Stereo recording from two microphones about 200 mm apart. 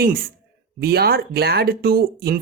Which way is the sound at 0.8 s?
50° right (ahead or behind).